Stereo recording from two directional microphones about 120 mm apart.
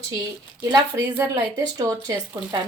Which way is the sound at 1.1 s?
20° right (ahead or behind).